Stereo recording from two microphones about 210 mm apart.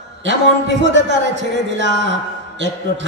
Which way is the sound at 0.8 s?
55° right (ahead or behind).